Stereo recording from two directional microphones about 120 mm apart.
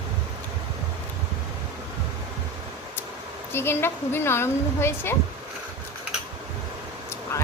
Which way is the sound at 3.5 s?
20° left (ahead or behind).